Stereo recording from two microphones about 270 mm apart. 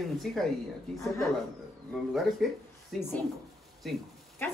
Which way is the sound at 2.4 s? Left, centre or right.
Centre.